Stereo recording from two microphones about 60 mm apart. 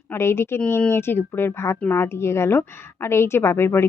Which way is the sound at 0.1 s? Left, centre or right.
Left.